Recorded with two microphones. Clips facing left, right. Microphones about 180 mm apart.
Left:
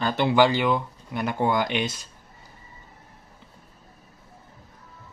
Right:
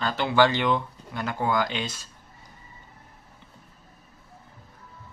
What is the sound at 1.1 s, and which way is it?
Speech, 20° left (ahead or behind).